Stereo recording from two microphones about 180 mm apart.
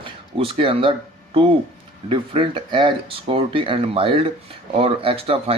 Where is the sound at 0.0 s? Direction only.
30° right (ahead or behind).